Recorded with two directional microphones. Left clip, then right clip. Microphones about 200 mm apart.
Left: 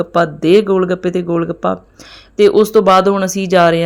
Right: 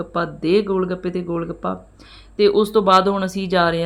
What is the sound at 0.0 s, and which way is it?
Speech, 35° left (ahead or behind).